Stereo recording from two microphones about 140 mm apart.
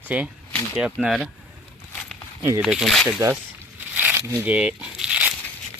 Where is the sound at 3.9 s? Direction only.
15° right (ahead or behind).